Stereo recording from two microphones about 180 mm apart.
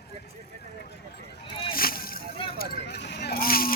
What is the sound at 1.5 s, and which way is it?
Boat, 30° left (ahead or behind).